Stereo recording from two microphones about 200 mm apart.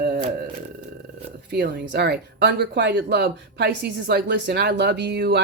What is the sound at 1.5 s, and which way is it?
Speech, 55° right (ahead or behind).